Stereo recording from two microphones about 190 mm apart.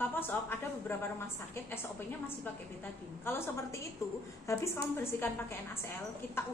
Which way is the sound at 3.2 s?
10° left (ahead or behind).